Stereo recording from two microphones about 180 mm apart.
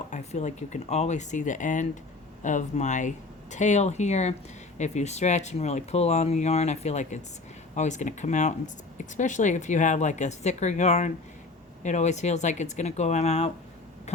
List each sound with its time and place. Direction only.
0.1 s speech: 40° left (ahead or behind)